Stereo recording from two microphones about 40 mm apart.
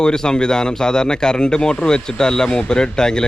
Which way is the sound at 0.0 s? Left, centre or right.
Centre.